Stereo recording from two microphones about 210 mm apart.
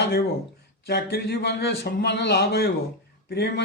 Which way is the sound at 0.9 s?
50° left (ahead or behind).